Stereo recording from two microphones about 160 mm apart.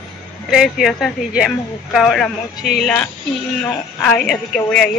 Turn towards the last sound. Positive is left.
turn(degrees=5)  # may be behind; listen again after turning